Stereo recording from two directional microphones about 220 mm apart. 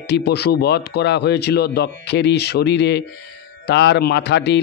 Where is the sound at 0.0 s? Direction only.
50° left (ahead or behind).